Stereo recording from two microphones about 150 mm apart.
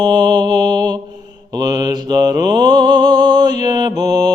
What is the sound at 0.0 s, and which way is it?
Mantra, 25° right (ahead or behind).